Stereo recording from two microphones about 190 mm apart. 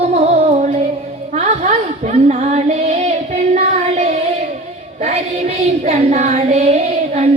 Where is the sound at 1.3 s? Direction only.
35° right (ahead or behind).